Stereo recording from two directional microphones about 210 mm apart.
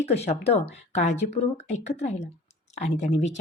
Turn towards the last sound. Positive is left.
turn(degrees=30)  # may be behind; listen again after turning